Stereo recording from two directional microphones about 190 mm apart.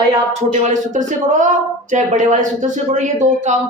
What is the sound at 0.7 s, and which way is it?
Speech, 40° right (ahead or behind).